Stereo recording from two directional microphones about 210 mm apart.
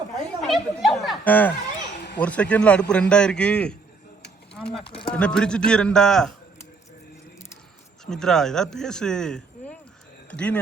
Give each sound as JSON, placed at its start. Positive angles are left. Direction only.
{"t": 0.4, "sound": "speech", "side_deg": 0}
{"t": 4.8, "sound": "speech", "side_deg": 25}
{"t": 5.1, "sound": "speech", "side_deg": 5}
{"t": 8.0, "sound": "speech", "side_deg": 5}